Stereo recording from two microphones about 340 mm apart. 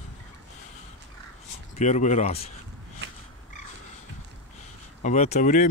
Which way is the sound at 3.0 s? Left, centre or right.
Right.